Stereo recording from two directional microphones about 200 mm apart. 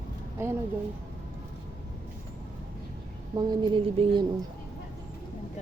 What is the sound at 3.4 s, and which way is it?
Speech, 20° right (ahead or behind).